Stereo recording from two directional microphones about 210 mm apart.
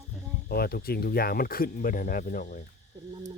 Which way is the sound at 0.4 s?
45° left (ahead or behind).